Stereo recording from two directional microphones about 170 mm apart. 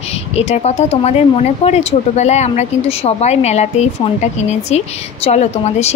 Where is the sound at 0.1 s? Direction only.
35° left (ahead or behind).